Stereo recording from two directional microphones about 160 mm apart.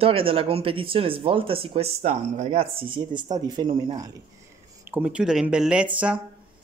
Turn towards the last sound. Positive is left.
turn(degrees=-5)  # may be behind; listen again after turning